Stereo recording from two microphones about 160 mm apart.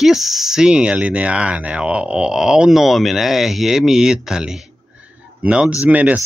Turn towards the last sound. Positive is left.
turn(degrees=-10)  # may be behind; listen again after turning